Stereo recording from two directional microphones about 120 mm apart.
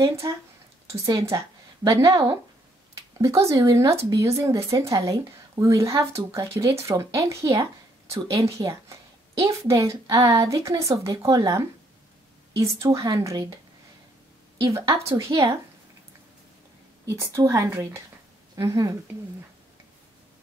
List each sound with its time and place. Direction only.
0.0 s a woman's voice: 25° right (ahead or behind)
14.7 s speech: 25° right (ahead or behind)
17.0 s speech: 25° right (ahead or behind)